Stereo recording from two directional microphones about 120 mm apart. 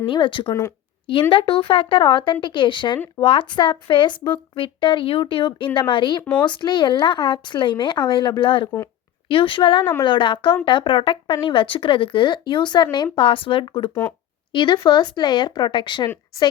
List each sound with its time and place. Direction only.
0.0 s speech: 45° left (ahead or behind)